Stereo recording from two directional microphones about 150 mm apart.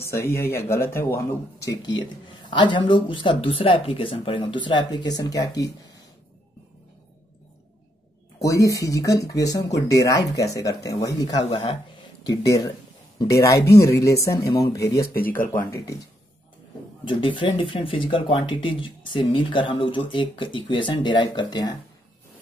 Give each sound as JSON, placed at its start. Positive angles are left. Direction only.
{"t": 0.0, "sound": "speech", "side_deg": 15}
{"t": 8.4, "sound": "speech", "side_deg": 20}
{"t": 15.1, "sound": "speech", "side_deg": 75}
{"t": 15.7, "sound": "speech", "side_deg": 20}
{"t": 17.1, "sound": "speech", "side_deg": 35}